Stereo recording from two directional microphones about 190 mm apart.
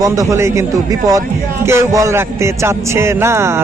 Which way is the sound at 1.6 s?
15° right (ahead or behind).